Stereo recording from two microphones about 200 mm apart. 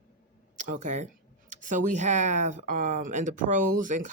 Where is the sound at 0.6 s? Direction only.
40° right (ahead or behind).